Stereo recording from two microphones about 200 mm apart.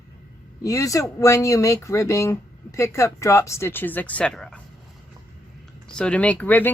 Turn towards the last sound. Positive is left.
turn(degrees=10)  # may be behind; listen again after turning